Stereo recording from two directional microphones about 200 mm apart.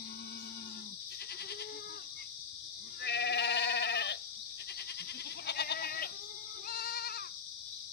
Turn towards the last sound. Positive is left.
turn(degrees=50)  # may be behind; listen again after turning